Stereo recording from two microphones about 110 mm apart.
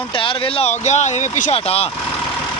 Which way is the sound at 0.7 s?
90° left.